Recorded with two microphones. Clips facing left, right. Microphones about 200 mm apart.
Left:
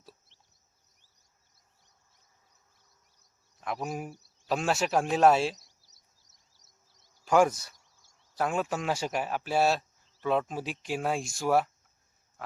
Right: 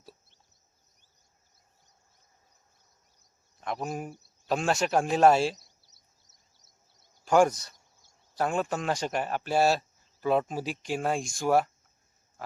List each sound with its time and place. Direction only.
3.6 s speech: centre (ahead or behind)
5.5 s a sound: 25° right (ahead or behind)
7.3 s speech: 5° left (ahead or behind)